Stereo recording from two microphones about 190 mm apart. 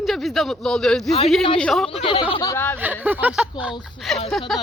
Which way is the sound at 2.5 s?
10° left (ahead or behind).